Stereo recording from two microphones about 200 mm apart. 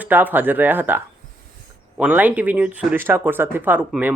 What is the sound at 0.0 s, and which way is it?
Speech, 10° right (ahead or behind).